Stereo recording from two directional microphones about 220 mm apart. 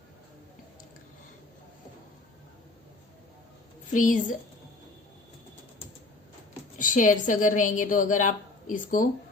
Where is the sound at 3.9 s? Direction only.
35° left (ahead or behind).